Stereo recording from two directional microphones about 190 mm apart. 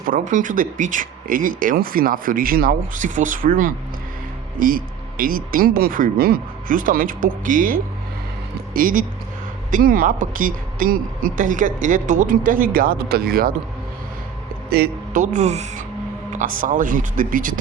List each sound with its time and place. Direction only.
0.0 s speech: 45° right (ahead or behind)
14.7 s speech: 45° right (ahead or behind)